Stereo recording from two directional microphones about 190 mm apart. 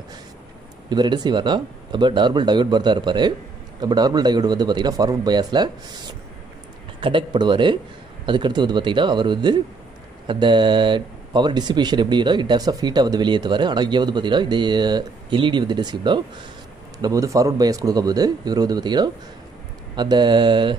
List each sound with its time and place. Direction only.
0.8 s speech: 25° right (ahead or behind)
7.0 s speech: 25° right (ahead or behind)